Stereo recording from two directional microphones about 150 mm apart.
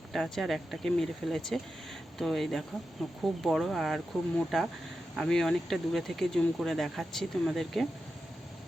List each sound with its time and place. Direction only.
0.1 s speech: centre (ahead or behind)